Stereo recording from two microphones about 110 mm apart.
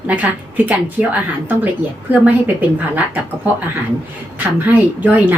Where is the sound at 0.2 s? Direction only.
15° right (ahead or behind).